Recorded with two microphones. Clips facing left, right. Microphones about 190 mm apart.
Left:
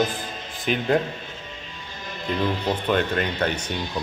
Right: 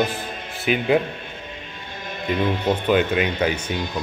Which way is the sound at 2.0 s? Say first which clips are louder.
Right 3 dB; 60° right (ahead or behind).